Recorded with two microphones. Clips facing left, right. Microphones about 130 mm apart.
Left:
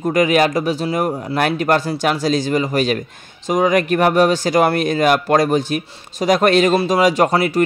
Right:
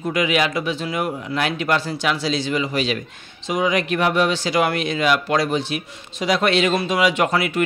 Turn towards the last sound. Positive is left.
turn(degrees=35)  # may be behind; listen again after turning